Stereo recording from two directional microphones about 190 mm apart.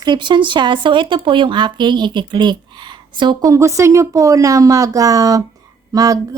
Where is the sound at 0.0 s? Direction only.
25° right (ahead or behind).